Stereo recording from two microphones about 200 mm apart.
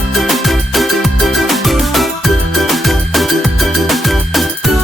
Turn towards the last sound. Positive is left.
turn(degrees=0)  # may be behind; listen again after turning